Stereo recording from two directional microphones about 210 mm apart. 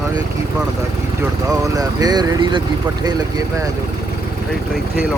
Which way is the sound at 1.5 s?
15° right (ahead or behind).